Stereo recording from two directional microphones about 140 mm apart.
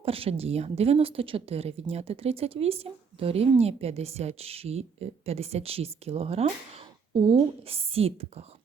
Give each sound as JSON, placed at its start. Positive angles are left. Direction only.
{"t": 0.0, "sound": "speech", "side_deg": -40}